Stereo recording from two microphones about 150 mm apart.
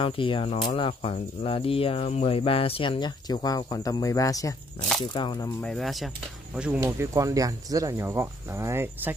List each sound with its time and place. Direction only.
0.0 s speech: 35° left (ahead or behind)
5.6 s speech: centre (ahead or behind)
6.8 s speech: 20° right (ahead or behind)